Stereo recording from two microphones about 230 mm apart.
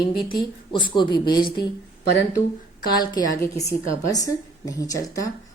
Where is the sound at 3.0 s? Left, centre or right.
Centre.